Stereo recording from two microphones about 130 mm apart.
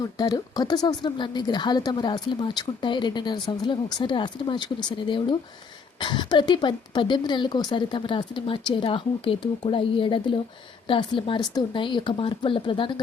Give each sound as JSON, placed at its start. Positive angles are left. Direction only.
{"t": 0.0, "sound": "speech", "side_deg": 30}